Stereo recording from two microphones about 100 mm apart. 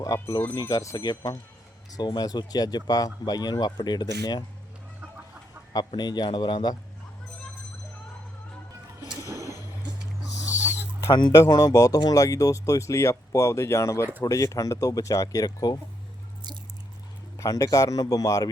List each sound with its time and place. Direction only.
0.0 s speech: 35° left (ahead or behind)
5.9 s speech: 45° left (ahead or behind)
11.1 s speech: 45° left (ahead or behind)
17.3 s speech: 35° left (ahead or behind)